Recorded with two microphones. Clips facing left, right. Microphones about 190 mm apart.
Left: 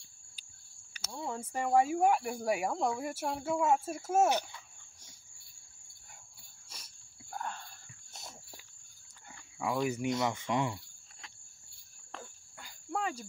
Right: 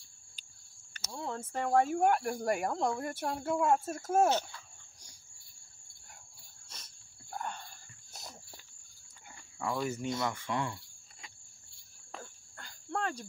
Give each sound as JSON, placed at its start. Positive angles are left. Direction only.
{"t": 0.9, "sound": "speech", "side_deg": 5}
{"t": 7.2, "sound": "a sound", "side_deg": 0}
{"t": 9.8, "sound": "speech", "side_deg": 15}
{"t": 12.2, "sound": "cricket", "side_deg": 5}